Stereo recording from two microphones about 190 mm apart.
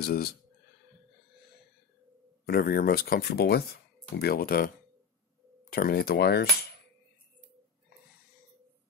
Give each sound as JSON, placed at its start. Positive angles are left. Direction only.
{"t": 0.0, "sound": "speech", "side_deg": 55}
{"t": 2.4, "sound": "speech", "side_deg": 50}
{"t": 5.7, "sound": "speech", "side_deg": 50}